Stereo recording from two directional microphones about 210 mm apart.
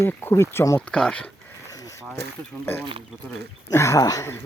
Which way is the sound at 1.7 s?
15° left (ahead or behind).